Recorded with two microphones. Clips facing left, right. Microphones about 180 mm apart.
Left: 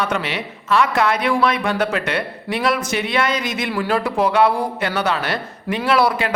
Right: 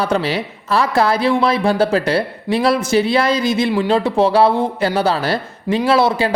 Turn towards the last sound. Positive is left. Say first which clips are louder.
# right 3 dB
turn(degrees=-25)  # may be behind; listen again after turning